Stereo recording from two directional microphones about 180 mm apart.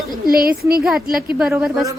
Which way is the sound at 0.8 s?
Centre (ahead or behind).